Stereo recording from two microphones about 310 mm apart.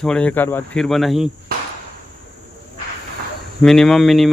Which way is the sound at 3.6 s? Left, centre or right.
Centre.